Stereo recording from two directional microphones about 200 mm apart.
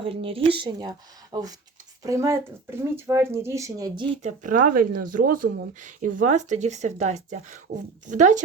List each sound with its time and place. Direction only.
0.0 s speech: 25° right (ahead or behind)
4.2 s speech: 35° right (ahead or behind)